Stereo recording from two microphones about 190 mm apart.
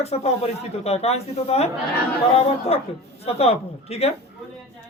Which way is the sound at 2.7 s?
30° left (ahead or behind).